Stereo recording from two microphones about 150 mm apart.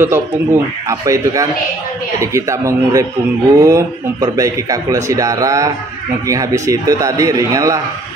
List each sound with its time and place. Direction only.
0.0 s a man's voice: 15° right (ahead or behind)